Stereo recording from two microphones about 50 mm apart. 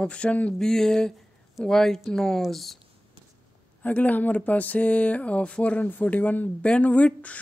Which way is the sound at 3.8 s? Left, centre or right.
Left.